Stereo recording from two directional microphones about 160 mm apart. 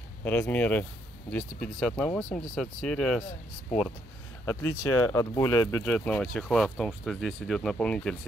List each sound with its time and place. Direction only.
0.2 s speech: 10° left (ahead or behind)
4.5 s speech: 20° left (ahead or behind)